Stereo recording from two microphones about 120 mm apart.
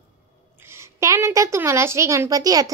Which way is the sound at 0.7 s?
25° right (ahead or behind).